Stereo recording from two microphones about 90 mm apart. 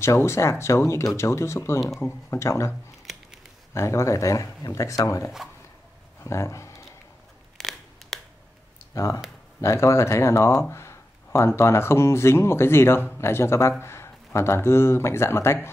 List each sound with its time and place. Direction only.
0.0 s speech: 30° left (ahead or behind)
3.7 s speech: 35° left (ahead or behind)
7.5 s scissors: 5° left (ahead or behind)
8.9 s speech: 35° left (ahead or behind)